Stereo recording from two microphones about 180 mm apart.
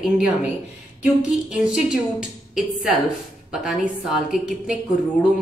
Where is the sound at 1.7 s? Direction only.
5° right (ahead or behind).